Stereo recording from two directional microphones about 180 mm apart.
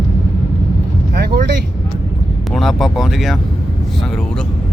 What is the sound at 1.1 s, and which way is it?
Speech, 60° right (ahead or behind).